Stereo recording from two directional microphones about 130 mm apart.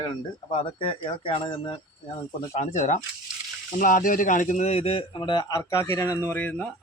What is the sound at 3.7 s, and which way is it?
Speech, 90° left.